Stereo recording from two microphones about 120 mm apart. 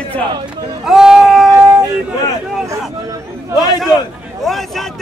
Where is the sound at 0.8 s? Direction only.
5° right (ahead or behind).